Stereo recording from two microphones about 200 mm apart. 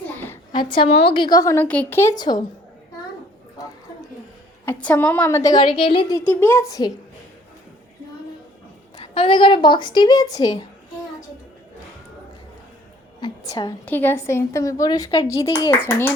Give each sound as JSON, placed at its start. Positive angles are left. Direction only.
{"t": 0.5, "sound": "a woman's voice", "side_deg": 25}
{"t": 3.6, "sound": "a sound", "side_deg": 20}
{"t": 4.6, "sound": "a woman's voice", "side_deg": 10}
{"t": 6.1, "sound": "a woman's voice", "side_deg": 10}
{"t": 9.0, "sound": "a woman's voice", "side_deg": 25}
{"t": 13.1, "sound": "a woman's voice", "side_deg": 20}